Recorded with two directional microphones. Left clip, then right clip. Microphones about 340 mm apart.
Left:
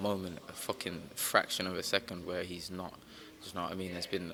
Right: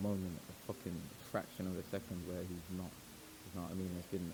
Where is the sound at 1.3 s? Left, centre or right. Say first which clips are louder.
Left 12 dB; centre.